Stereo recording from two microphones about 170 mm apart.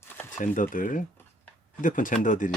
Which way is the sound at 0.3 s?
50° left (ahead or behind).